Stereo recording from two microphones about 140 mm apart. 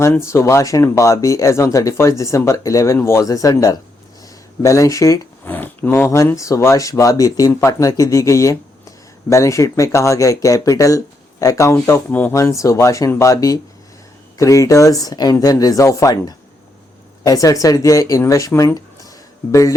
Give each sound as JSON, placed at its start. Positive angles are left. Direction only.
{"t": 0.0, "sound": "speech", "side_deg": 20}
{"t": 5.5, "sound": "a sound", "side_deg": 15}
{"t": 6.1, "sound": "speech", "side_deg": 20}